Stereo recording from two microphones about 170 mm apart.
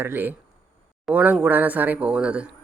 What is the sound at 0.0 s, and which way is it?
Speech, 10° right (ahead or behind).